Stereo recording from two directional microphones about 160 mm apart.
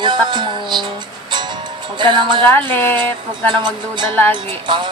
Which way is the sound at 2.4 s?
10° left (ahead or behind).